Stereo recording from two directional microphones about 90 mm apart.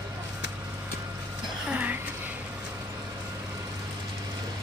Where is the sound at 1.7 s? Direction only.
20° right (ahead or behind).